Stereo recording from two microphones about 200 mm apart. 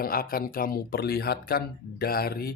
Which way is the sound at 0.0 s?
45° left (ahead or behind).